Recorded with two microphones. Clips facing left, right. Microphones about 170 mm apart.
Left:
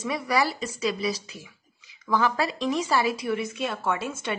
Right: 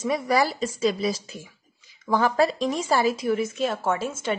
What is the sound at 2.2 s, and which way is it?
Speech, 45° right (ahead or behind).